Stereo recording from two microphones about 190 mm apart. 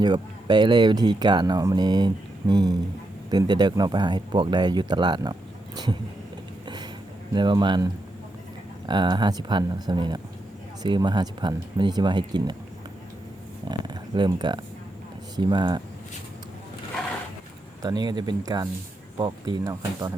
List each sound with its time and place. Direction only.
0.0 s speech: 25° right (ahead or behind)
7.3 s speech: 25° right (ahead or behind)
8.9 s speech: 25° right (ahead or behind)
13.7 s speech: 20° right (ahead or behind)
17.8 s speech: 20° right (ahead or behind)